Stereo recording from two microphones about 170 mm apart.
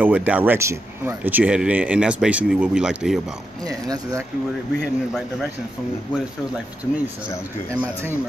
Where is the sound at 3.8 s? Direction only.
20° right (ahead or behind).